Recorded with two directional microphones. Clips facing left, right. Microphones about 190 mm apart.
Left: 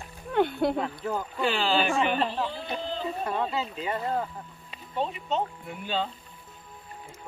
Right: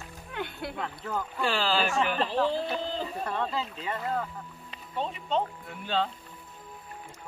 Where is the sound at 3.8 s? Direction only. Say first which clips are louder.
Left 3 dB; 30° left (ahead or behind).